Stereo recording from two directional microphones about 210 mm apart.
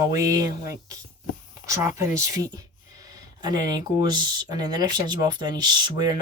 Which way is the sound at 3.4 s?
20° right (ahead or behind).